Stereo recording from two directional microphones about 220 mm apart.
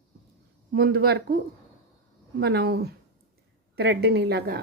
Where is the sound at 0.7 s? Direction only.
45° right (ahead or behind).